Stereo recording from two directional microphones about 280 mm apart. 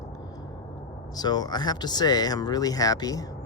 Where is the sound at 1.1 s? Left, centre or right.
Centre.